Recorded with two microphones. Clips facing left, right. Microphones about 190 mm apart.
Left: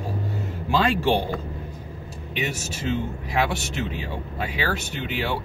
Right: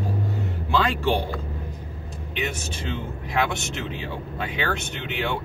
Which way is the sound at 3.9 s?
5° left (ahead or behind).